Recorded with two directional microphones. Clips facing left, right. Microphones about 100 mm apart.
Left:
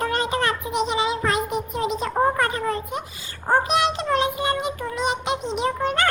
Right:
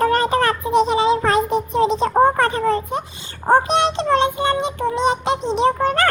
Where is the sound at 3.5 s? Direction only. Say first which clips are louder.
Right 5 dB; 30° right (ahead or behind).